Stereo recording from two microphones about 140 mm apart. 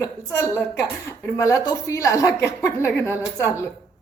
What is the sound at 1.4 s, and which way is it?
A woman's voice, 25° left (ahead or behind).